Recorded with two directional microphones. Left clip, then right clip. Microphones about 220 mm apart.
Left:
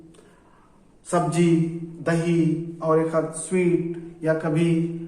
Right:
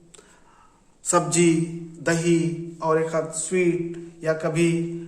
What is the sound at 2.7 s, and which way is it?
A man's voice, 50° right (ahead or behind).